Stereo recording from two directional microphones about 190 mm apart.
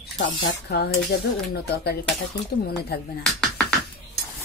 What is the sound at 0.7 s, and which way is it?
Speech, 55° left (ahead or behind).